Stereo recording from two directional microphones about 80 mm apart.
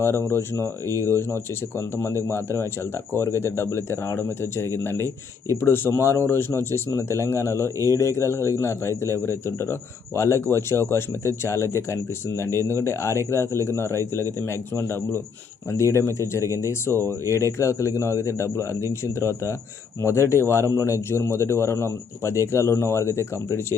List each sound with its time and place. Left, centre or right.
0.0 s speech: left